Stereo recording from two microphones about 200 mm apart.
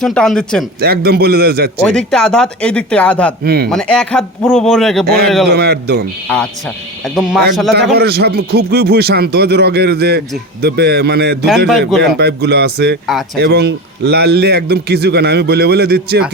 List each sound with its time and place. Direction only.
0.0 s speech: 5° left (ahead or behind)
0.8 s a man's voice: 50° right (ahead or behind)
1.8 s speech: 5° left (ahead or behind)
3.4 s a man's voice: 50° right (ahead or behind)
3.7 s speech: 5° left (ahead or behind)
5.0 s a man's voice: 50° right (ahead or behind)
6.2 s speech: 5° left (ahead or behind)
7.7 s a man's voice: 55° right (ahead or behind)
13.1 s speech: centre (ahead or behind)
13.4 s a man's voice: 55° right (ahead or behind)